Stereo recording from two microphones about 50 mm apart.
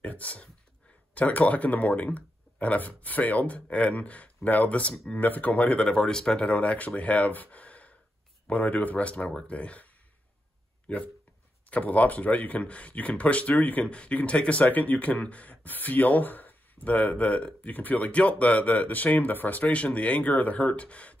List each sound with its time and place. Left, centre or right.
0.0 s a sound: left
1.1 s speech: left
6.5 s speech: left
10.9 s speech: left
13.8 s speech: left
17.6 s speech: left